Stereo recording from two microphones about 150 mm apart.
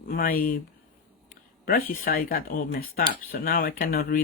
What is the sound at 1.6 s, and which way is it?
Speech, 75° left (ahead or behind).